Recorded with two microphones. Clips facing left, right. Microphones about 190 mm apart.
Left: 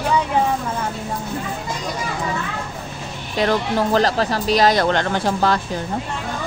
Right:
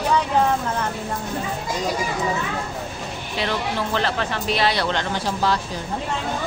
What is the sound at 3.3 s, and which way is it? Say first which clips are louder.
Speech: left 6 dB; 45° left (ahead or behind).